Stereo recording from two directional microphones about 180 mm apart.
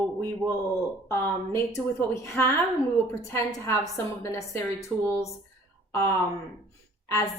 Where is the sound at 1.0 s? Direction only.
15° left (ahead or behind).